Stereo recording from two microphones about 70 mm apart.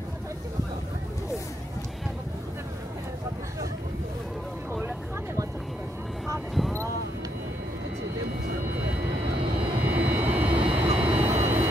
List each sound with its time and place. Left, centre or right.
9.8 s vehicle: right